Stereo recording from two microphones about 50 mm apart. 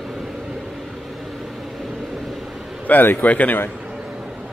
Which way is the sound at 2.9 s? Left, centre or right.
Left.